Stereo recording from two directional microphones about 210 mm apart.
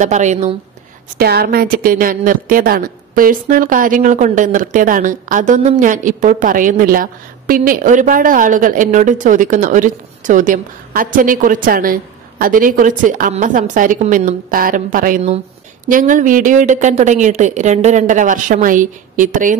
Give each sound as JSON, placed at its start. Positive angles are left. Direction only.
{"t": 0.0, "sound": "a woman's voice", "side_deg": -35}
{"t": 1.1, "sound": "a woman's voice", "side_deg": -45}